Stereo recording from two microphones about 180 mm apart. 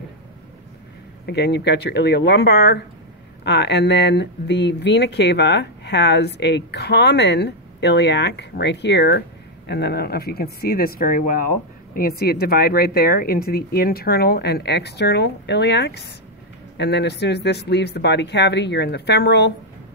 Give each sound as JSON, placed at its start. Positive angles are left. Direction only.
{"t": 1.2, "sound": "speech", "side_deg": 70}